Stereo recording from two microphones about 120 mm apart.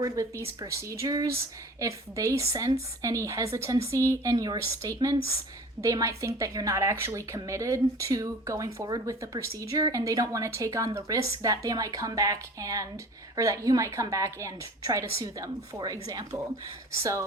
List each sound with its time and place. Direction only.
0.6 s speech: 25° right (ahead or behind)